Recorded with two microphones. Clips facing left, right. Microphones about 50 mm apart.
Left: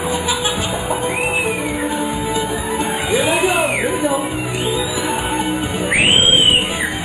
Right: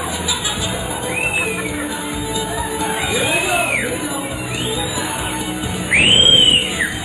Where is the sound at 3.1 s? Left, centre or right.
Left.